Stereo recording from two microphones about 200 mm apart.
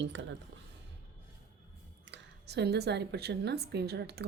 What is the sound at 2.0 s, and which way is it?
Speech, 60° right (ahead or behind).